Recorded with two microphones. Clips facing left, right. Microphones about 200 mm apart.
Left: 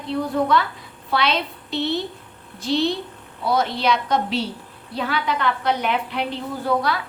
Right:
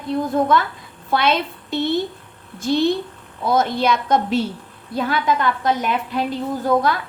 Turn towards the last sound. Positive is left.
turn(degrees=-45)  # may be behind; listen again after turning